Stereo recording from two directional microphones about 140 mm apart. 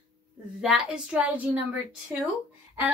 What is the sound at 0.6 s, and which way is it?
A woman's voice, centre (ahead or behind).